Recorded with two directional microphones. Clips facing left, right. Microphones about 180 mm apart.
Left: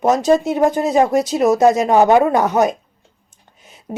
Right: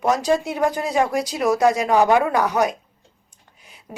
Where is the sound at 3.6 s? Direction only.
25° left (ahead or behind).